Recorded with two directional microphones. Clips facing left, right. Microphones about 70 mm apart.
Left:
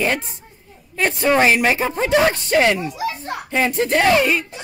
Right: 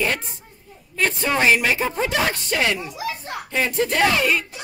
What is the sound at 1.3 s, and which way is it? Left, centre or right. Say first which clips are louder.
Speech: left 3 dB; left.